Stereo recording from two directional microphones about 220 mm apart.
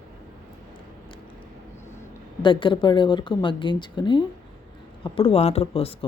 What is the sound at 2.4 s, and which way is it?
Speech, 20° left (ahead or behind).